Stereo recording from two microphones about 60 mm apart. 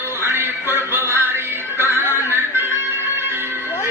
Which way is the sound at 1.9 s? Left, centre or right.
Left.